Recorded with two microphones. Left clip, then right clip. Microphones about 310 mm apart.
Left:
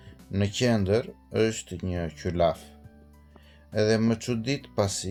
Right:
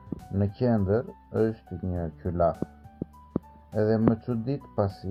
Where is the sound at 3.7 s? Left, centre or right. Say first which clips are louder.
Even; left.